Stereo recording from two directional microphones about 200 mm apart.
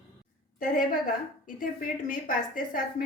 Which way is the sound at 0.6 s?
45° left (ahead or behind).